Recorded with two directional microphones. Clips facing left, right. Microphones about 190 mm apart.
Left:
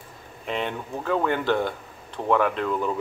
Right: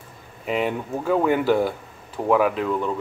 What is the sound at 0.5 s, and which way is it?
Speech, 5° right (ahead or behind).